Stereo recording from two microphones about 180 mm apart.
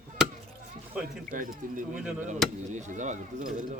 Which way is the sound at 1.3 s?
50° right (ahead or behind).